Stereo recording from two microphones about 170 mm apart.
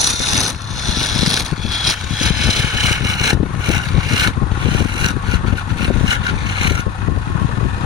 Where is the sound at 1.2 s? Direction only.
Centre (ahead or behind).